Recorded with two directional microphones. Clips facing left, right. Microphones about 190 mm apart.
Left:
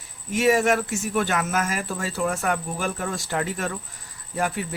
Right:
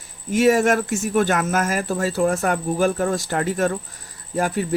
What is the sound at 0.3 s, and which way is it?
Speech, 40° right (ahead or behind).